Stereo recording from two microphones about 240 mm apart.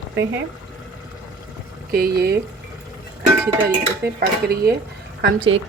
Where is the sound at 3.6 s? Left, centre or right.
Right.